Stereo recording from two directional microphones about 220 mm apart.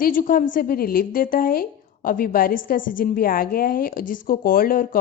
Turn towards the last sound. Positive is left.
turn(degrees=40)  # may be behind; listen again after turning